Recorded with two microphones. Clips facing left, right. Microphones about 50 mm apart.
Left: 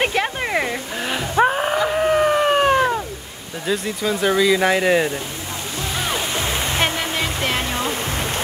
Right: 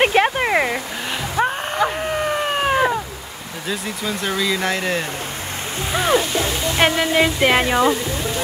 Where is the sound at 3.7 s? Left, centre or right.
Centre.